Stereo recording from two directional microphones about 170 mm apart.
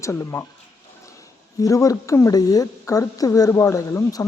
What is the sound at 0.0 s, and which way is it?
Speech, 15° left (ahead or behind).